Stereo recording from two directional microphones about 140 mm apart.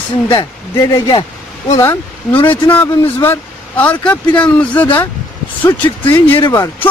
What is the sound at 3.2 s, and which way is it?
Speech, 15° left (ahead or behind).